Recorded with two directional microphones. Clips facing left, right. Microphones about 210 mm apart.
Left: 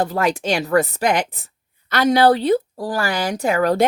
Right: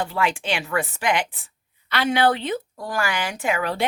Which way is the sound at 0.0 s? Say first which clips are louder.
Left 5 dB; 40° left (ahead or behind).